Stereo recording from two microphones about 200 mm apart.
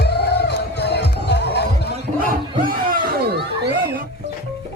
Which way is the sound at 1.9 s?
45° right (ahead or behind).